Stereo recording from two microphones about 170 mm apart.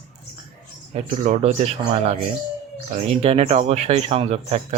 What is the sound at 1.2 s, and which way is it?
Speech, 40° right (ahead or behind).